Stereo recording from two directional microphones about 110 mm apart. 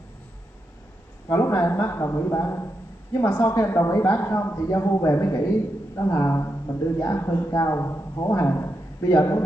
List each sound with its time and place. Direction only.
1.3 s a woman's voice: 25° left (ahead or behind)